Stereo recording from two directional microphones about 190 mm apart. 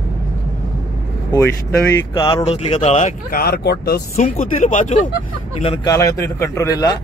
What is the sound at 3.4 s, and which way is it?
Speech, 60° left (ahead or behind).